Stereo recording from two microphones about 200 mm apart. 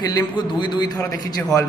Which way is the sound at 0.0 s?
20° left (ahead or behind).